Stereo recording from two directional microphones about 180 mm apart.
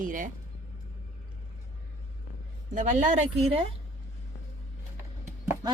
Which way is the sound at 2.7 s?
45° right (ahead or behind).